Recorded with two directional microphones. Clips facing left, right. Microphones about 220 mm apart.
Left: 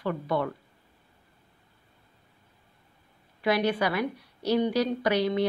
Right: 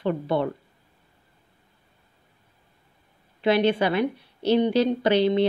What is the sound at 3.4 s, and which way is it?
A woman's voice, 25° right (ahead or behind).